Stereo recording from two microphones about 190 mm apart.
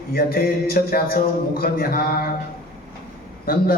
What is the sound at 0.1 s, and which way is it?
A man's voice, 50° left (ahead or behind).